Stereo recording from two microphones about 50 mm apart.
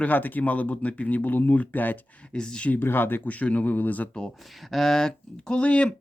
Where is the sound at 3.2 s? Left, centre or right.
Left.